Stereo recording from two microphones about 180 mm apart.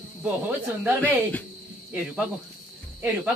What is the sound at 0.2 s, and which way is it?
Speech, 10° right (ahead or behind).